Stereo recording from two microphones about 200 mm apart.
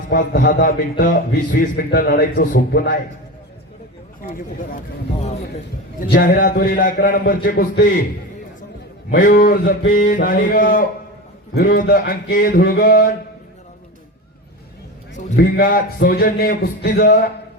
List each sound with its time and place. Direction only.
0.1 s a man's voice: 45° left (ahead or behind)
4.2 s a man's voice: 45° left (ahead or behind)
6.1 s a man's voice: 45° left (ahead or behind)
9.1 s a man's voice: 45° left (ahead or behind)
15.1 s a man's voice: 50° left (ahead or behind)